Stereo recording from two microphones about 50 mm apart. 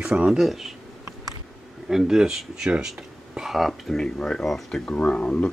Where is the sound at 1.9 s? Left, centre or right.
Centre.